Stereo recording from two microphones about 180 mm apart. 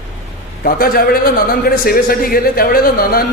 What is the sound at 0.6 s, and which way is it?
A man's voice, 55° left (ahead or behind).